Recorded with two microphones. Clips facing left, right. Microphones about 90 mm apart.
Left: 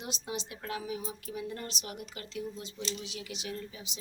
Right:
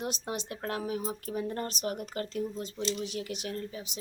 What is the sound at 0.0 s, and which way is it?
Speech, 50° right (ahead or behind).